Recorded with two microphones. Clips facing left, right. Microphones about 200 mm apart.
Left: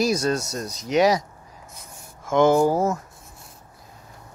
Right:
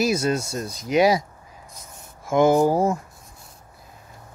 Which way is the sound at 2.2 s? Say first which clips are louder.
Even; 10° right (ahead or behind).